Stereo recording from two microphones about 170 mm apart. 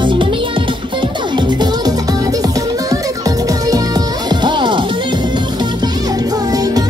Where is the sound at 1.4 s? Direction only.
25° right (ahead or behind).